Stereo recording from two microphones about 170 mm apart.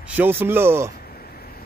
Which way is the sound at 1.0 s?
65° left (ahead or behind).